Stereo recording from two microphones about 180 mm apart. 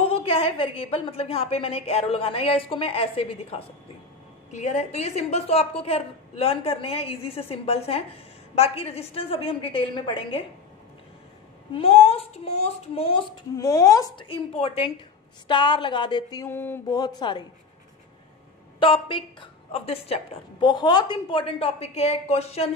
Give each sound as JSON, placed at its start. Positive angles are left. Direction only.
{"t": 0.0, "sound": "a woman's voice", "side_deg": 30}
{"t": 11.7, "sound": "a woman's voice", "side_deg": 30}
{"t": 13.6, "sound": "a woman's voice", "side_deg": 20}
{"t": 18.8, "sound": "a woman's voice", "side_deg": 30}